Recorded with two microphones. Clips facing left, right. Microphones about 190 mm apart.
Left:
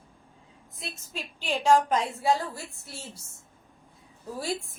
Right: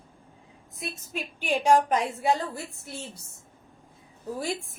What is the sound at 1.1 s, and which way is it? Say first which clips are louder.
Speech: right 3 dB; 15° right (ahead or behind).